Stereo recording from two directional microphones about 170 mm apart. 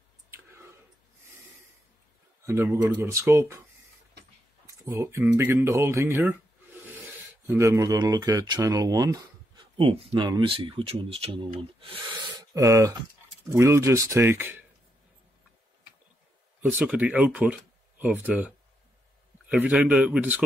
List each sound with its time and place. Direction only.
2.4 s speech: 15° right (ahead or behind)
4.6 s speech: 15° right (ahead or behind)
7.4 s speech: 15° right (ahead or behind)
9.8 s speech: 35° right (ahead or behind)
12.5 s speech: 20° right (ahead or behind)
16.6 s speech: 10° right (ahead or behind)
19.5 s speech: 5° right (ahead or behind)